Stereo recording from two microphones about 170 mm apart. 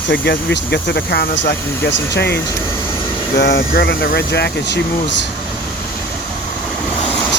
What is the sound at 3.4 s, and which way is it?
Speech, 65° left (ahead or behind).